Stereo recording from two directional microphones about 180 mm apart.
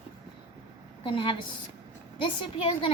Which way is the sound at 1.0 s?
30° left (ahead or behind).